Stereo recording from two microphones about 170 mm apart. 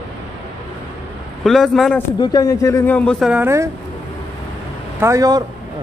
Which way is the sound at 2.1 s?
25° left (ahead or behind).